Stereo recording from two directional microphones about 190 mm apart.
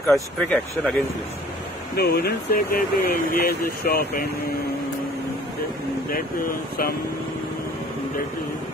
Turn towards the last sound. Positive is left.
turn(degrees=50)  # may be behind; listen again after turning